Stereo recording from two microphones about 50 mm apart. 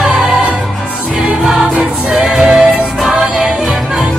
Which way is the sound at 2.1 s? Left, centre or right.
Centre.